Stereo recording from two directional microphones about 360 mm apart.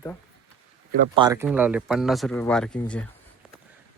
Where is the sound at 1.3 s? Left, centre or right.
Centre.